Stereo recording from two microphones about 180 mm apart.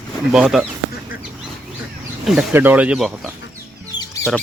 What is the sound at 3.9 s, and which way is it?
Music, 25° left (ahead or behind).